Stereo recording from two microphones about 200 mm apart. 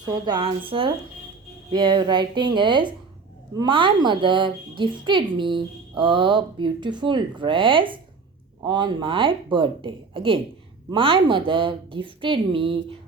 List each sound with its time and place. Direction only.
0.0 s a woman's voice: 25° right (ahead or behind)